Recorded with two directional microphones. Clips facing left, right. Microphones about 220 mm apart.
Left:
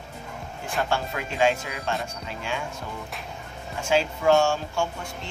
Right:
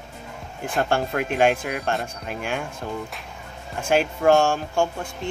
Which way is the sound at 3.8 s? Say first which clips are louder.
Right 3 dB; 55° right (ahead or behind).